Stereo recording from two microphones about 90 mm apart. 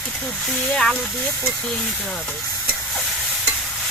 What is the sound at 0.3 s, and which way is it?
Speech, 5° left (ahead or behind).